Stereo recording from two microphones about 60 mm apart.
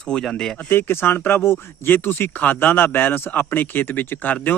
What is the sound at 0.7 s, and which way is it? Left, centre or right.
A man's voice, left.